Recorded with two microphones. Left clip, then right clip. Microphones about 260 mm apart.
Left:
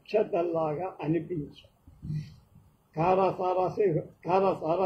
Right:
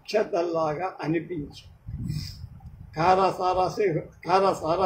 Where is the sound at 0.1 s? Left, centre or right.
Right.